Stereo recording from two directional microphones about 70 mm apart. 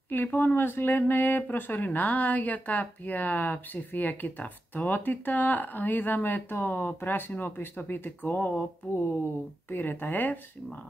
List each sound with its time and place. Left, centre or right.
0.1 s speech: left
9.7 s speech: left